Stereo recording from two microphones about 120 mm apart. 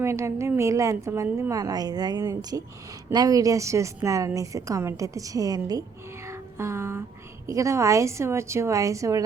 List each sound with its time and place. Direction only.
0.0 s a woman's voice: 25° right (ahead or behind)
6.2 s music: 25° right (ahead or behind)
7.4 s a woman's voice: 25° right (ahead or behind)